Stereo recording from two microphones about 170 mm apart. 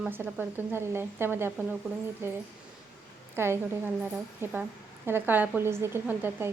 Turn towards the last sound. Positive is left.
turn(degrees=-10)  # may be behind; listen again after turning